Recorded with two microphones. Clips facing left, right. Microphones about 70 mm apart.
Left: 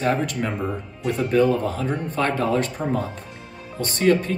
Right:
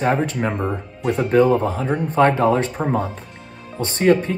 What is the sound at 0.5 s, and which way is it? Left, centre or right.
Speech, centre.